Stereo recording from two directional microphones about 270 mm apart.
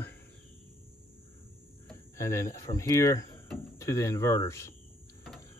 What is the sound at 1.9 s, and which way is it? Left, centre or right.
Speech, centre.